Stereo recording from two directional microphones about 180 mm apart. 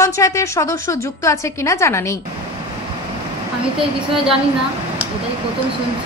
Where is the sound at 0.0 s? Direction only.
15° left (ahead or behind).